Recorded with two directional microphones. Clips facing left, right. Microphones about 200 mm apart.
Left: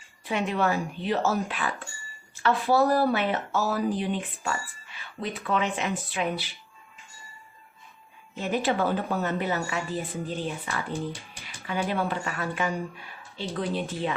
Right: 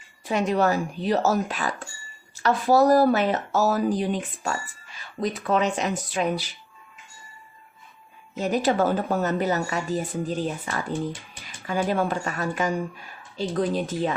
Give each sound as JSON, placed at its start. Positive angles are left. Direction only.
{"t": 0.3, "sound": "a woman's voice", "side_deg": -40}
{"t": 8.4, "sound": "a woman's voice", "side_deg": -40}